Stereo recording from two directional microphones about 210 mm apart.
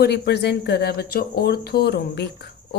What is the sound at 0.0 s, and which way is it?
A woman's voice, 50° left (ahead or behind).